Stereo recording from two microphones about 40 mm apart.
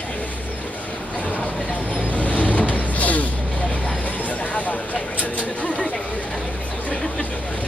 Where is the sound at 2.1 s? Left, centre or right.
Left.